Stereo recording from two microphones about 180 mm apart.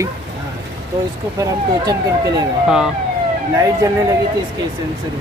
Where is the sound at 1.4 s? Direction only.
20° right (ahead or behind).